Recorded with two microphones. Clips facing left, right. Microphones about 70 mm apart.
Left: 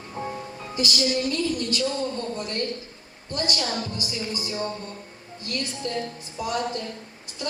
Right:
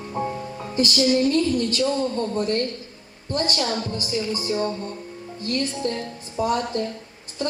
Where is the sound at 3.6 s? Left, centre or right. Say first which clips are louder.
Right 3 dB; right.